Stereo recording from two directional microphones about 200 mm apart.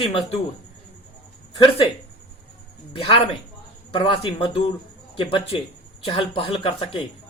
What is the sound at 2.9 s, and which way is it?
Speech, 30° left (ahead or behind).